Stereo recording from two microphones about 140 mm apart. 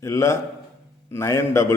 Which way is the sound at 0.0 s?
20° left (ahead or behind).